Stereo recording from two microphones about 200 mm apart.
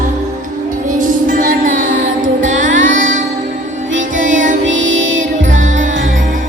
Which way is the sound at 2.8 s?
70° right (ahead or behind).